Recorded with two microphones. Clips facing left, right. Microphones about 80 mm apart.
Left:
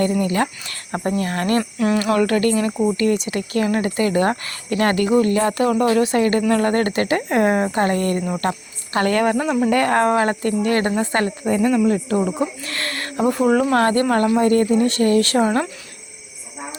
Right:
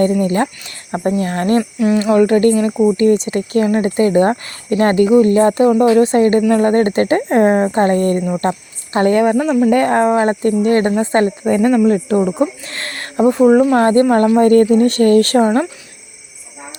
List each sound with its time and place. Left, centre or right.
0.0 s speech: right
0.9 s speech: centre
11.4 s speech: right
12.0 s speech: right
14.3 s speech: right